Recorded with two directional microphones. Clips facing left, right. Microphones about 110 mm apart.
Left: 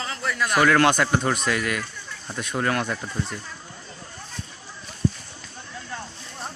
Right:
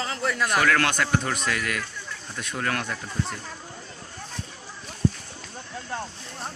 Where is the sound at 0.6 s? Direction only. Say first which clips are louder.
Left 6 dB; 20° left (ahead or behind).